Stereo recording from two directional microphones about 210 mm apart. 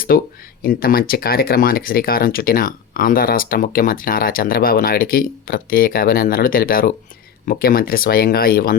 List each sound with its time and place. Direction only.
0.1 s speech: 45° left (ahead or behind)